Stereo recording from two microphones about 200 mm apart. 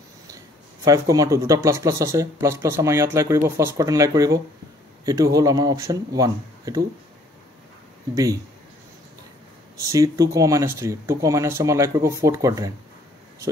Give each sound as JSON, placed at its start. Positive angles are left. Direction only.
{"t": 0.8, "sound": "speech", "side_deg": -15}
{"t": 8.1, "sound": "speech", "side_deg": -15}
{"t": 9.8, "sound": "speech", "side_deg": -15}